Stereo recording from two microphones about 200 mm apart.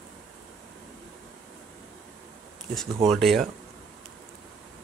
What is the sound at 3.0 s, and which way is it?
Speech, centre (ahead or behind).